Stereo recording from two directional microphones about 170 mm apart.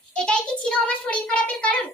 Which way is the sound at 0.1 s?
5° left (ahead or behind).